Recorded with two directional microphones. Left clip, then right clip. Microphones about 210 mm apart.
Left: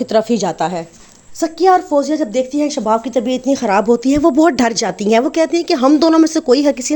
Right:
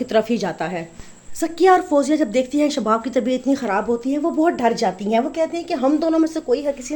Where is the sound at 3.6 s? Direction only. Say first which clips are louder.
Left 8 dB; 35° left (ahead or behind).